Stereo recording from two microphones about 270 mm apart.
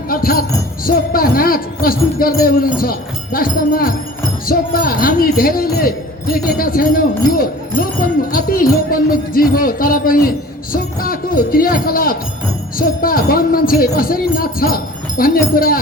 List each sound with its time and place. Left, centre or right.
0.1 s jingle bell: left
0.9 s speech: left